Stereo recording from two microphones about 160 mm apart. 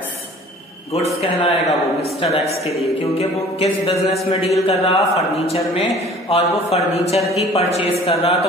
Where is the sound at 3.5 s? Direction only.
40° left (ahead or behind).